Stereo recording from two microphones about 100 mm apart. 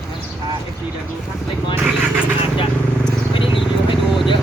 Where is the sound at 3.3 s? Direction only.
60° left (ahead or behind).